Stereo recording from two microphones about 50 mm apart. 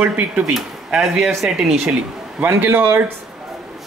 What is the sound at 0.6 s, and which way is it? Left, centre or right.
Speech, centre.